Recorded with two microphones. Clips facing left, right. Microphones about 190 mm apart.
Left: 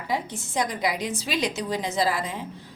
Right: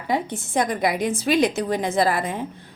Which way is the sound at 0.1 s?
55° right (ahead or behind).